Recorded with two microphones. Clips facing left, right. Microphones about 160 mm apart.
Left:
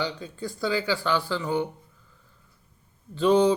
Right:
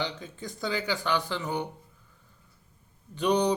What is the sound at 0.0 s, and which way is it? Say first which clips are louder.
Speech: left 4 dB; 20° right (ahead or behind).